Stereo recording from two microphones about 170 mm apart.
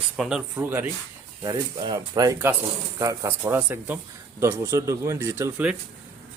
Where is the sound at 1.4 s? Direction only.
25° right (ahead or behind); by 5.7 s 10° right (ahead or behind).